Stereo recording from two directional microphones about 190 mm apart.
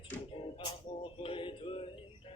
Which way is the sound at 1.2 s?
30° left (ahead or behind).